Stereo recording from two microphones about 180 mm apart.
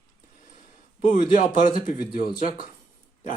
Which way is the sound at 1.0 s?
45° left (ahead or behind).